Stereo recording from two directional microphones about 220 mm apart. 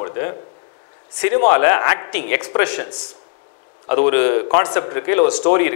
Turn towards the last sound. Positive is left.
turn(degrees=15)  # may be behind; listen again after turning